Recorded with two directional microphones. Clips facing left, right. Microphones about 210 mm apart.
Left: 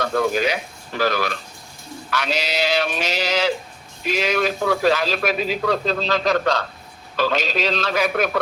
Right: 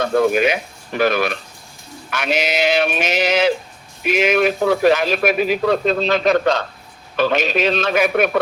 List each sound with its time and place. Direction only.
0.0 s speech: 20° right (ahead or behind)
2.0 s sheep: 20° right (ahead or behind)
5.1 s a man's voice: 15° right (ahead or behind)
5.6 s sheep: 20° right (ahead or behind)